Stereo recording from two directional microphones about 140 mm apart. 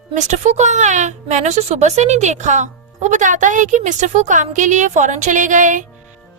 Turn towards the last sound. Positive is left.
turn(degrees=-65)  # may be behind; listen again after turning